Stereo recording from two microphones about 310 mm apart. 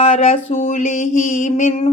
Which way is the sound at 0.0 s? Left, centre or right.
Centre.